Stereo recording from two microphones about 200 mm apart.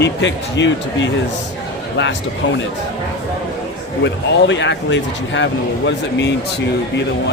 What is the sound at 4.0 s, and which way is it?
Speech, 60° left (ahead or behind).